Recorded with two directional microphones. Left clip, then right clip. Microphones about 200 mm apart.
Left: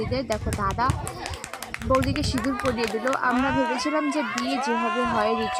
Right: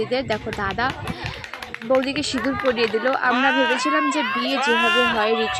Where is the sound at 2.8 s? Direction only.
Centre (ahead or behind).